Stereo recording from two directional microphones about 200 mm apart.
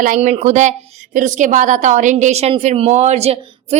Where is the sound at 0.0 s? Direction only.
40° right (ahead or behind).